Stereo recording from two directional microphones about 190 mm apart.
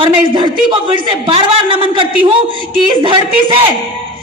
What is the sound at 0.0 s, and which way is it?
A man's voice, 25° right (ahead or behind).